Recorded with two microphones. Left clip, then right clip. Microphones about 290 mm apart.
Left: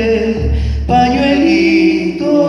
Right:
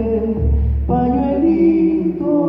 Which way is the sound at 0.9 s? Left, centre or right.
Left.